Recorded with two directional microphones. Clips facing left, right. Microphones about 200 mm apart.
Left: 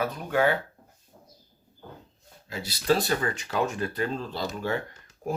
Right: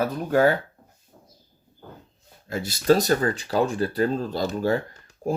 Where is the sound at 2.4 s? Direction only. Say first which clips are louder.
Right 5 dB; 50° right (ahead or behind).